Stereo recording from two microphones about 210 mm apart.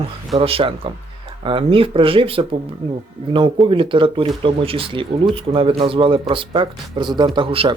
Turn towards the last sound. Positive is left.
turn(degrees=-25)  # may be behind; listen again after turning